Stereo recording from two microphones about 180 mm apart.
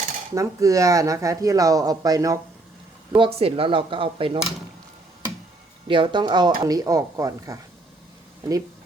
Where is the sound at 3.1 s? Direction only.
30° right (ahead or behind).